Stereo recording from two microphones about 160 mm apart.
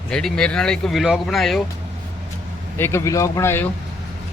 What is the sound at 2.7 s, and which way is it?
Speech, 15° left (ahead or behind).